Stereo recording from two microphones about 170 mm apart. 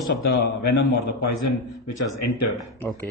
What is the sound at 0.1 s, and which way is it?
Speech, 75° left (ahead or behind).